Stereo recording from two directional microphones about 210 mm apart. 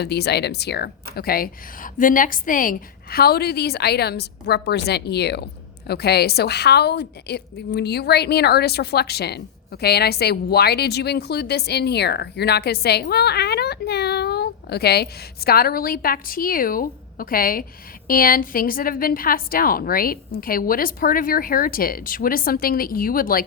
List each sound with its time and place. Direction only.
0.0 s a woman's voice: 50° left (ahead or behind)